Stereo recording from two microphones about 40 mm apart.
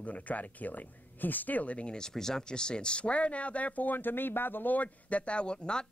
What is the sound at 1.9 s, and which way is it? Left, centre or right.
Speech, centre.